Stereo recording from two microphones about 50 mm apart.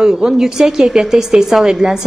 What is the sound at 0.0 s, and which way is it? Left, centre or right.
A woman's voice, centre.